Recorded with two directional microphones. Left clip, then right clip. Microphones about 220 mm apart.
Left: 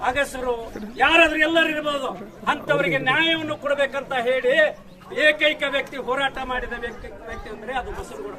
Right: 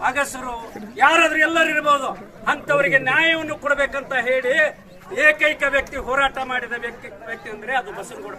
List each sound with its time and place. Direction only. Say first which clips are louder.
0.0 s a man's voice: right 1 dB; centre (ahead or behind)
3.7 s a man's voice: right 2 dB; 20° left (ahead or behind)
5.1 s a man's voice: right 2 dB; centre (ahead or behind)